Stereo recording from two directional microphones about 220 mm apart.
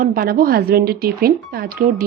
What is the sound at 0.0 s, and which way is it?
Speech, 40° right (ahead or behind).